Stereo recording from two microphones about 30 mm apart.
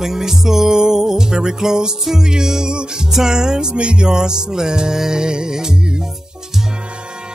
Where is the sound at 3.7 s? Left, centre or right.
Right.